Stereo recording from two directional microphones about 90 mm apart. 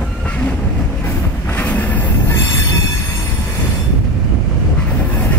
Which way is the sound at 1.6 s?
20° left (ahead or behind).